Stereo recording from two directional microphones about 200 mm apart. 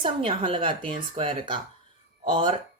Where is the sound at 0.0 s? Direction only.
25° right (ahead or behind).